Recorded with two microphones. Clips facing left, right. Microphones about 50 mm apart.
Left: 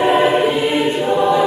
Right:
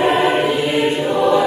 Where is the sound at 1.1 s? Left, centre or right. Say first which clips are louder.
Even; centre.